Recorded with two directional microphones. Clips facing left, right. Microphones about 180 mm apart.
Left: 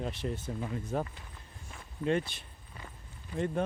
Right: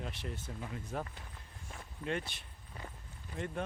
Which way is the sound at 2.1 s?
30° left (ahead or behind).